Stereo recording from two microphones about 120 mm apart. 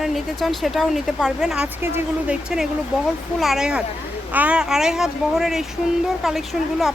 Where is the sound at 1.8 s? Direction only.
20° right (ahead or behind).